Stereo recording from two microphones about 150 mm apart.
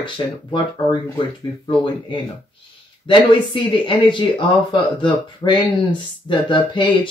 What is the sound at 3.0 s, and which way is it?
Speech, 30° left (ahead or behind).